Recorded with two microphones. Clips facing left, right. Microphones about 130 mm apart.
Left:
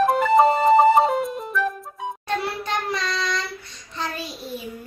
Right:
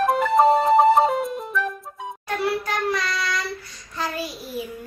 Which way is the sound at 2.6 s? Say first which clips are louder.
Right 1 dB; 25° left (ahead or behind).